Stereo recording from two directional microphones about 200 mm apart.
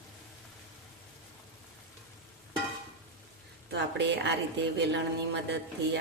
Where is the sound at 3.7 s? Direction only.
60° right (ahead or behind).